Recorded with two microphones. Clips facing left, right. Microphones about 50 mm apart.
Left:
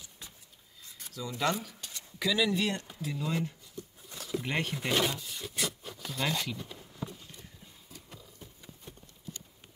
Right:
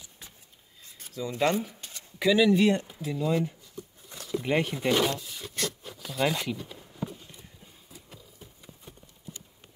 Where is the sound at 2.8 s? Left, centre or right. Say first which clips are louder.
Right 6 dB; centre.